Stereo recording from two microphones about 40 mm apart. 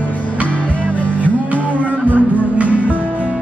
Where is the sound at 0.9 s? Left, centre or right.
Left.